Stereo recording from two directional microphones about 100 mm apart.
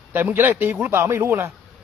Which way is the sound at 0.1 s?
20° right (ahead or behind).